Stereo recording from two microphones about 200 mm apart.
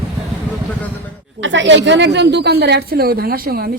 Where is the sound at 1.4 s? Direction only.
65° right (ahead or behind); by 3.7 s 50° right (ahead or behind).